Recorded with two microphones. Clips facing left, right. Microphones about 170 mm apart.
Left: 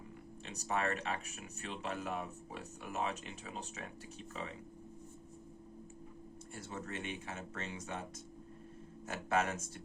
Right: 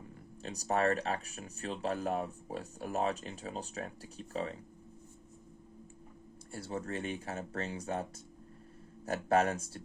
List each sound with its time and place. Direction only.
0.4 s speech: 40° right (ahead or behind)
6.5 s speech: 35° right (ahead or behind)
9.0 s speech: 40° right (ahead or behind)